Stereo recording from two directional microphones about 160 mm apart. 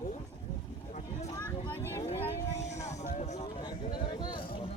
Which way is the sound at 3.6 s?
30° left (ahead or behind).